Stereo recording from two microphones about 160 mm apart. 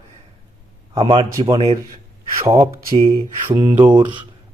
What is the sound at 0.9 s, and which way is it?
Speech, 30° right (ahead or behind).